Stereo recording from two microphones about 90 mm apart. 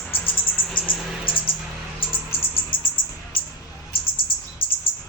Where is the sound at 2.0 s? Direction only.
75° left (ahead or behind).